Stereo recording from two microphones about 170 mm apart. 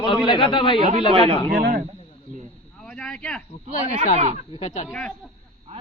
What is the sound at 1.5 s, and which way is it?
Speech, 60° right (ahead or behind).